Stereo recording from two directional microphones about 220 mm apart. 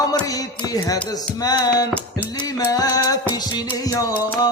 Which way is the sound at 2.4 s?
15° left (ahead or behind).